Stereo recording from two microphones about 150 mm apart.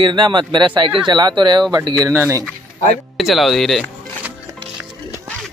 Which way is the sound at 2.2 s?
20° right (ahead or behind).